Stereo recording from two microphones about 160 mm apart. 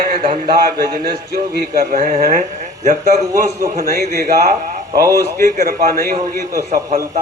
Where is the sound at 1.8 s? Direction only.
55° right (ahead or behind).